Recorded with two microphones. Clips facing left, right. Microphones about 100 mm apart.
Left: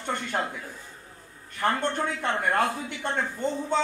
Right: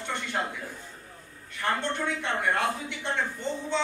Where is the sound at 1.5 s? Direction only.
45° left (ahead or behind).